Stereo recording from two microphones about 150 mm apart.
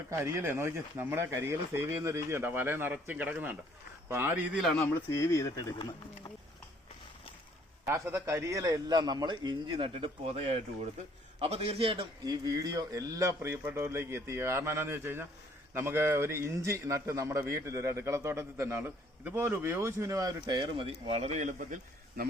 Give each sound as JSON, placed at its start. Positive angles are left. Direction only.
{"t": 0.1, "sound": "speech", "side_deg": -20}
{"t": 5.1, "sound": "speech", "side_deg": 20}
{"t": 7.9, "sound": "a man's voice", "side_deg": -20}
{"t": 12.2, "sound": "a man's voice", "side_deg": -25}
{"t": 20.5, "sound": "speech", "side_deg": -35}